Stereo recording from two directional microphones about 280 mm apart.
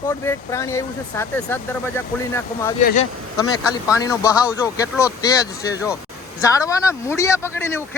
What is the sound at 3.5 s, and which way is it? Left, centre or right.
Speech, centre.